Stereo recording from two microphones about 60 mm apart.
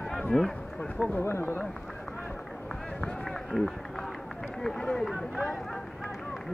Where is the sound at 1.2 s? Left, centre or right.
Left.